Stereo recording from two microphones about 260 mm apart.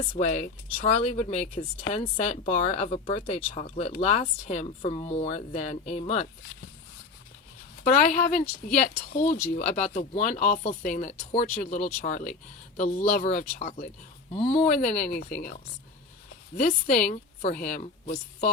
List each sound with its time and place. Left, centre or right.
0.0 s speech: left
8.7 s speech: left
14.9 s speech: centre
15.3 s speech: left
16.6 s a woman's voice: left